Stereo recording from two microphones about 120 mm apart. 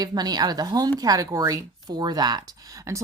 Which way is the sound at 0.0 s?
35° right (ahead or behind).